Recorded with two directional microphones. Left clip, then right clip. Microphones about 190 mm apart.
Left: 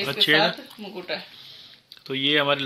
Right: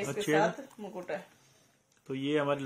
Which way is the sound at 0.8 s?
20° right (ahead or behind).